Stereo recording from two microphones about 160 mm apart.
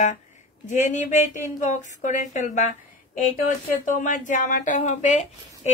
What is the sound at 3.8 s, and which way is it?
Speech, 55° left (ahead or behind).